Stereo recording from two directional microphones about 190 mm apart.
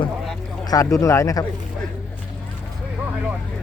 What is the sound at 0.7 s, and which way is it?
Speech, 15° left (ahead or behind).